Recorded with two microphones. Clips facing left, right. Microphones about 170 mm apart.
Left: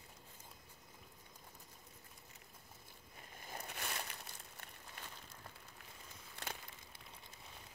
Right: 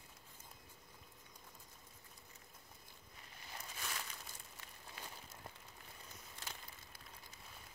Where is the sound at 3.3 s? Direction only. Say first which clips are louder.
Left 4 dB; 50° left (ahead or behind); by 4.2 s 65° left (ahead or behind).